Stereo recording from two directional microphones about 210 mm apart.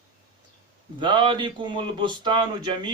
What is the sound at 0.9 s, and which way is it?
Speech, 20° right (ahead or behind).